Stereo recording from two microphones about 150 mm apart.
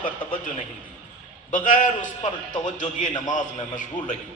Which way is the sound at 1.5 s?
60° left (ahead or behind).